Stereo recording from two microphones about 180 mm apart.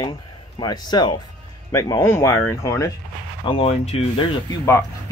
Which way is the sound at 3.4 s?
30° left (ahead or behind).